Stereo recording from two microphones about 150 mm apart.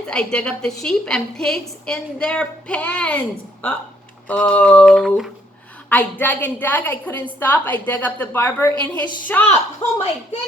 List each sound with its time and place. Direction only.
0.1 s a woman's voice: 5° left (ahead or behind)
5.9 s a woman's voice: 10° left (ahead or behind)
8.7 s a woman's voice: 30° right (ahead or behind)
9.2 s a woman's voice: 10° left (ahead or behind)